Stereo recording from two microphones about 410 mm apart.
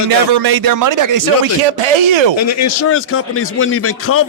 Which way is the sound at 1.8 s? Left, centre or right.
Right.